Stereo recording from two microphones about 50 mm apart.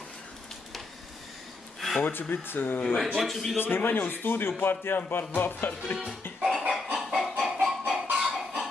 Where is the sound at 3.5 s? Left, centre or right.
Left.